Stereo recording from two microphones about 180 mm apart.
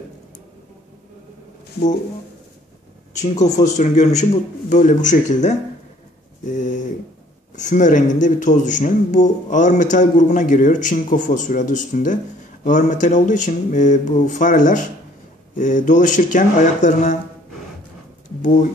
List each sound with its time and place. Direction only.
3.2 s a man's voice: 40° left (ahead or behind)
18.4 s speech: 45° left (ahead or behind)